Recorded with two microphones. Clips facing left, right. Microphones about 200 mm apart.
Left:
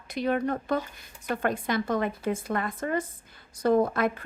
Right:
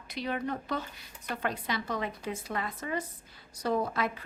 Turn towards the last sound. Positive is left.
turn(degrees=50)  # may be behind; listen again after turning